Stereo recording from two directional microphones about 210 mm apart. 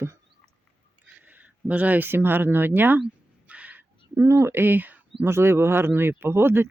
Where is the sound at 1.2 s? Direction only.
10° right (ahead or behind).